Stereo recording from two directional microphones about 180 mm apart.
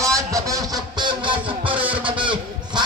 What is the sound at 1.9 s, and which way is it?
Honk, 30° right (ahead or behind).